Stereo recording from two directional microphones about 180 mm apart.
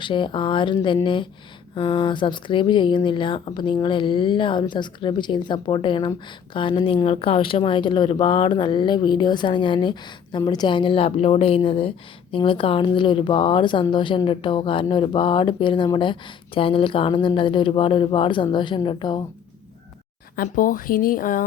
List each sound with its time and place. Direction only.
0.0 s a woman's voice: 25° left (ahead or behind)
20.3 s speech: 50° left (ahead or behind)